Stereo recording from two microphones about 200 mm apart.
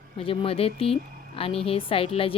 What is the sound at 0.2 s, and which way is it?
A woman's voice, 25° left (ahead or behind).